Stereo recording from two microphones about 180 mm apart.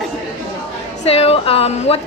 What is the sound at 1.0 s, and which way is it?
Speech, 35° left (ahead or behind).